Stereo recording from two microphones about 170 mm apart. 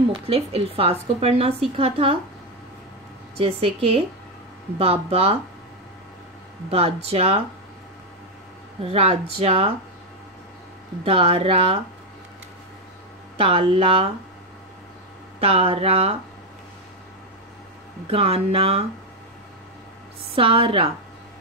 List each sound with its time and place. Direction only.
0.1 s speech: 35° right (ahead or behind)
3.3 s speech: 35° right (ahead or behind)
6.7 s speech: 35° right (ahead or behind)
8.8 s speech: 35° right (ahead or behind)
11.1 s speech: 35° right (ahead or behind)
13.4 s speech: 35° right (ahead or behind)
15.4 s speech: 35° right (ahead or behind)
18.0 s speech: 35° right (ahead or behind)
20.3 s speech: 30° right (ahead or behind)